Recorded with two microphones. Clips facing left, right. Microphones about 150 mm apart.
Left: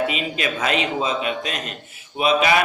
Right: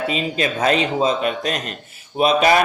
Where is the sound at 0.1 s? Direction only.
35° right (ahead or behind).